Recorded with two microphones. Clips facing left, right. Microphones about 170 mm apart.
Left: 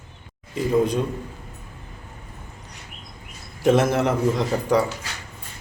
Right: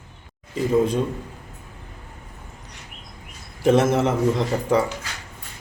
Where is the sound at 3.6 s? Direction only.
Centre (ahead or behind).